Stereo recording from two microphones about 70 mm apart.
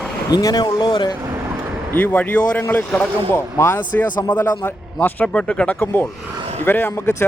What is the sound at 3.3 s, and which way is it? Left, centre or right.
Speech, left.